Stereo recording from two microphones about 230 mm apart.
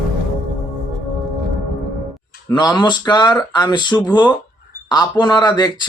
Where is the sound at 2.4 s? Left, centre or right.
Centre.